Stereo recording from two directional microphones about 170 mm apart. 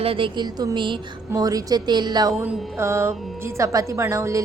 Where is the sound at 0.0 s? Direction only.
30° right (ahead or behind).